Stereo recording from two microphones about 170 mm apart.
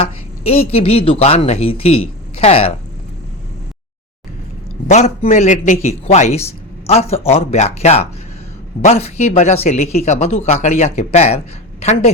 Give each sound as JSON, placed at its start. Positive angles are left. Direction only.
{"t": 0.0, "sound": "speech", "side_deg": 35}
{"t": 4.9, "sound": "speech", "side_deg": 40}